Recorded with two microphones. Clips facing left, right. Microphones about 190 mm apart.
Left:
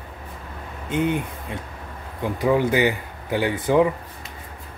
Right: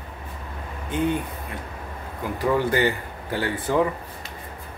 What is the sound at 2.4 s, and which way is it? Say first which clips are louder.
Speech: left 2 dB; 15° left (ahead or behind).